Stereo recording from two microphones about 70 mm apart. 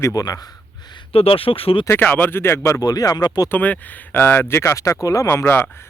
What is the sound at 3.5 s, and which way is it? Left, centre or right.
Speech, left.